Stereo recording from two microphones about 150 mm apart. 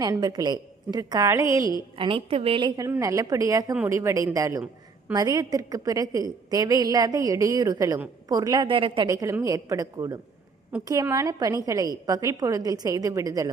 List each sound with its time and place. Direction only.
0.0 s a woman's voice: 25° right (ahead or behind)
2.0 s a woman's voice: 35° right (ahead or behind)
9.1 s a woman's voice: 20° right (ahead or behind)